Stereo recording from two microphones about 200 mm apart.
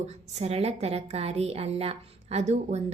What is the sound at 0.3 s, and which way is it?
A woman's voice, 30° right (ahead or behind).